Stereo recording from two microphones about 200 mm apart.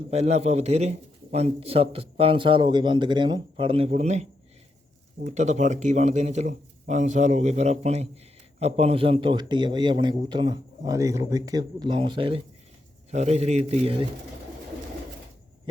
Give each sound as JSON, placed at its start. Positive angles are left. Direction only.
{"t": 0.1, "sound": "a man's voice", "side_deg": -30}